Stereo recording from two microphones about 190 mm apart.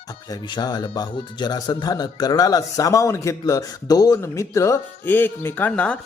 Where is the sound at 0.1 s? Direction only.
20° left (ahead or behind).